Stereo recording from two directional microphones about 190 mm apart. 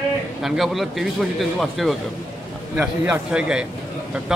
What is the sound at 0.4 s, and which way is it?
A man's voice, centre (ahead or behind).